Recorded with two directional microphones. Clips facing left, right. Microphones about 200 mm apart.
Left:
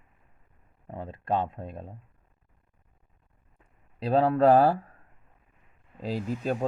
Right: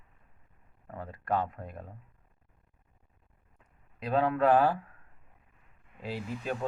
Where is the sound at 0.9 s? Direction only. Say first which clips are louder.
Left 3 dB; 25° left (ahead or behind).